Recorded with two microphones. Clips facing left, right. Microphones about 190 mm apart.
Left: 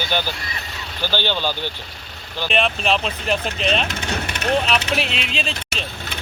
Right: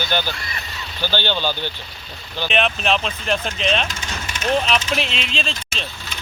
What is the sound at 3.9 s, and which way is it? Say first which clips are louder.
Vehicle: left 5 dB; 60° left (ahead or behind).